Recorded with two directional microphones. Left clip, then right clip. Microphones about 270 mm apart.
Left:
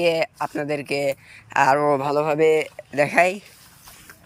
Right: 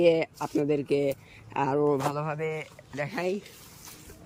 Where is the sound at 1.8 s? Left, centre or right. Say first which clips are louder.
Left 7 dB; left.